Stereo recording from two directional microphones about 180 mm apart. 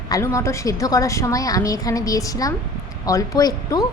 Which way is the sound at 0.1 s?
15° left (ahead or behind).